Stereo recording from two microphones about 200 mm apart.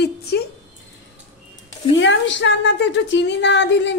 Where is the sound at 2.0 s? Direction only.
65° left (ahead or behind).